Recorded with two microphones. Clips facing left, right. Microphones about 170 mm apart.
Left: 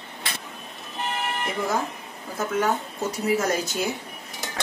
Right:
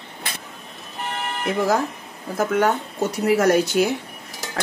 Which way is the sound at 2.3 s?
65° right (ahead or behind).